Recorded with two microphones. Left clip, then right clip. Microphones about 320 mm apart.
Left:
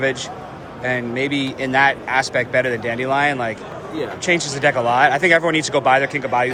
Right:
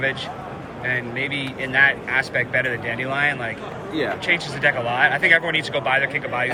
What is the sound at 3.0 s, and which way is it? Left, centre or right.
Speech, centre.